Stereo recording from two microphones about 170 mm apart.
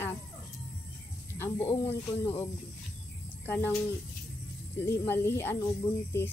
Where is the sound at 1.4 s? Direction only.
15° left (ahead or behind).